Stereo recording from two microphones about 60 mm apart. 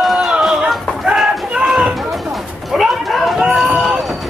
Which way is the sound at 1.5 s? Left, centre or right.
Centre.